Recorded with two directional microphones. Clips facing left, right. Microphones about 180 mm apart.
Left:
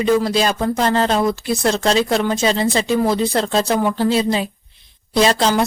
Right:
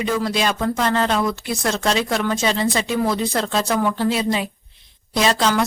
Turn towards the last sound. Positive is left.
turn(degrees=30)  # may be behind; listen again after turning